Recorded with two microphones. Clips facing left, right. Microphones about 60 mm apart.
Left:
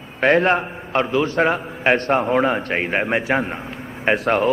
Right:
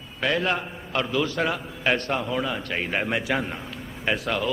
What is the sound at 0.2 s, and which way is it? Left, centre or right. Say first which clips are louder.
A man's voice: left 9 dB; left.